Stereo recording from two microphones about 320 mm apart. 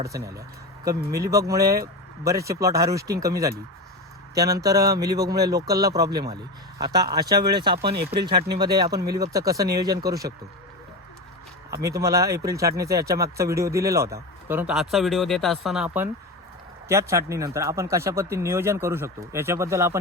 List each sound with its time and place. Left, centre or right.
1.3 s speech: centre
7.8 s speech: right
8.6 s speech: centre
11.7 s speech: centre